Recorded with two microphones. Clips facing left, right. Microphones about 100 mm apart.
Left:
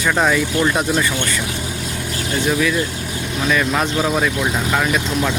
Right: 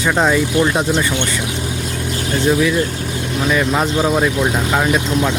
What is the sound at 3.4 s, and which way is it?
Speech, 15° right (ahead or behind).